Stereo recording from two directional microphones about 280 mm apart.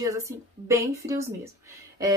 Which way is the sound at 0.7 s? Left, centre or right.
Centre.